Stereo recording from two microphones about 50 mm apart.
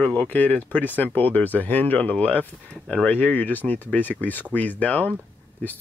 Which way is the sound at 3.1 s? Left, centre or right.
Left.